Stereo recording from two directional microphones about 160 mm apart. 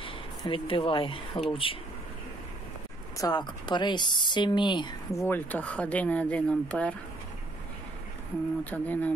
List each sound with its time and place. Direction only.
0.5 s speech: 35° left (ahead or behind)
3.2 s speech: 25° left (ahead or behind); by 7.0 s 10° left (ahead or behind)
8.6 s speech: 10° left (ahead or behind)